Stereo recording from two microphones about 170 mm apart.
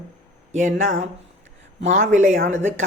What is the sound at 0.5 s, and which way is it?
A woman's voice, 45° right (ahead or behind).